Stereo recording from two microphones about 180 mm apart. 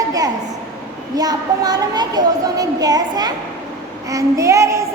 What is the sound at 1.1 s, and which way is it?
A child's voice, 20° right (ahead or behind).